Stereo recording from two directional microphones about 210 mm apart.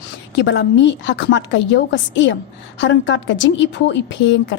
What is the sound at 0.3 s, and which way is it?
A woman's voice, 60° left (ahead or behind).